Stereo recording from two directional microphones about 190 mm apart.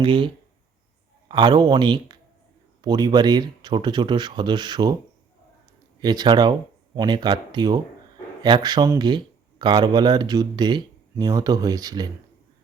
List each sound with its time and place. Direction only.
0.0 s speech: 25° right (ahead or behind)
1.3 s speech: 25° right (ahead or behind)
6.0 s speech: 20° right (ahead or behind)